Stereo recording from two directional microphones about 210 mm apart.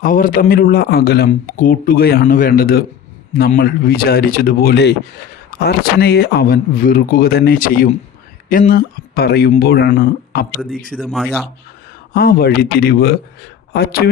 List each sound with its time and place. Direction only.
0.0 s speech: 40° left (ahead or behind)
10.9 s speech: centre (ahead or behind)
12.1 s speech: 45° left (ahead or behind)